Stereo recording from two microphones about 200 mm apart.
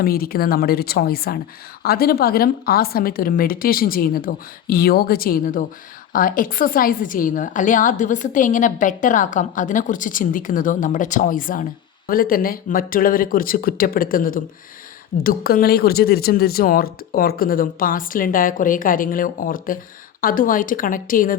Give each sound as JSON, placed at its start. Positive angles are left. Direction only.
{"t": 0.0, "sound": "a woman's voice", "side_deg": 50}